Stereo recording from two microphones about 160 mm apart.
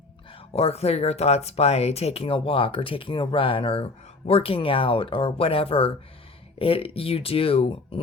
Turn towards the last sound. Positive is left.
turn(degrees=35)  # may be behind; listen again after turning